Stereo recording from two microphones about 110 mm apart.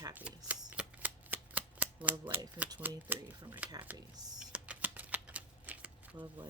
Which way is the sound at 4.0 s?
40° right (ahead or behind).